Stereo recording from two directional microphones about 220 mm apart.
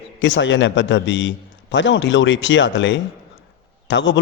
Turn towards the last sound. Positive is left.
turn(degrees=55)  # may be behind; listen again after turning